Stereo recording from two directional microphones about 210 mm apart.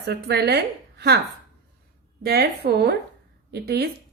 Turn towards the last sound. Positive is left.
turn(degrees=-50)  # may be behind; listen again after turning